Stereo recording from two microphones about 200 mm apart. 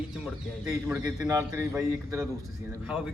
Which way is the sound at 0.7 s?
10° right (ahead or behind).